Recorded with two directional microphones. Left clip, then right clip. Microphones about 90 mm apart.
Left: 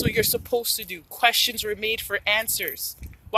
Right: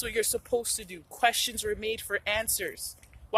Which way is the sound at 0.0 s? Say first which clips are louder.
Left 6 dB; 35° right (ahead or behind).